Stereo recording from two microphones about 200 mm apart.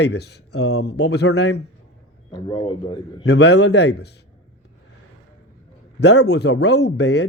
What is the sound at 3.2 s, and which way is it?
Speech, 60° left (ahead or behind).